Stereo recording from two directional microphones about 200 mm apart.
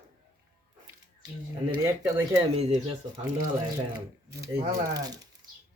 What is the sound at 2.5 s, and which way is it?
Speech, 30° right (ahead or behind).